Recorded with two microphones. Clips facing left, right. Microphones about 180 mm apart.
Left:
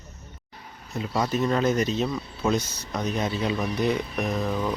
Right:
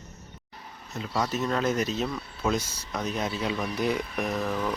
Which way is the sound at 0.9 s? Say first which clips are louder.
Left 3 dB; 10° left (ahead or behind).